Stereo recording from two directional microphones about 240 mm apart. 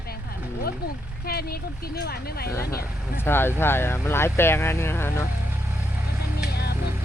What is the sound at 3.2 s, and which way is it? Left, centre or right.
Speech, centre.